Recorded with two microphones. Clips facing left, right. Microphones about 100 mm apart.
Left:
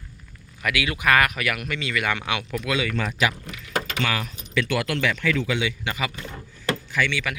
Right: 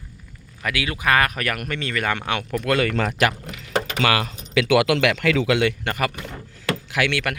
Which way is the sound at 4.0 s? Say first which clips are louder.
Right 6 dB; 80° right.